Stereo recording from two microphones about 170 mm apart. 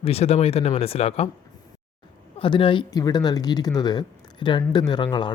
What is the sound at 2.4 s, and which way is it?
Speech, 30° left (ahead or behind).